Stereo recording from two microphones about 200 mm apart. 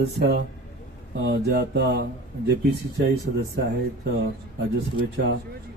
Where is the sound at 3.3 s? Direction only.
55° right (ahead or behind).